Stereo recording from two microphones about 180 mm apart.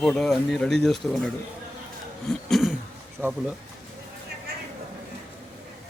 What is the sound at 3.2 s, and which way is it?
Speech, 10° right (ahead or behind).